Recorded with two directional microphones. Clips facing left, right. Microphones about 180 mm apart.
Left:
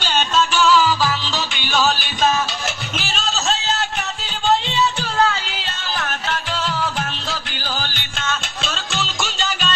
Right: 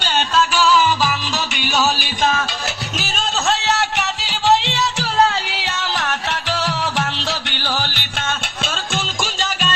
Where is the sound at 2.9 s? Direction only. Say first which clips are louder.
Right 3 dB; 45° right (ahead or behind); by 8.3 s 75° right (ahead or behind).